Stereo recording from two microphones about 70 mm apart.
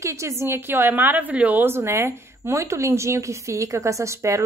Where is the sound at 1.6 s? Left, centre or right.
Right.